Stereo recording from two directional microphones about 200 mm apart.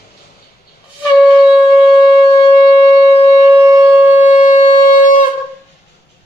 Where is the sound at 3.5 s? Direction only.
15° right (ahead or behind).